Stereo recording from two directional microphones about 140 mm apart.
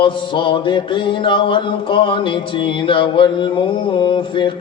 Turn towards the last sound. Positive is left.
turn(degrees=35)  # may be behind; listen again after turning